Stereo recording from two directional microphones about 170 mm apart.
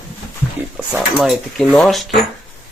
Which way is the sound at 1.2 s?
Centre (ahead or behind).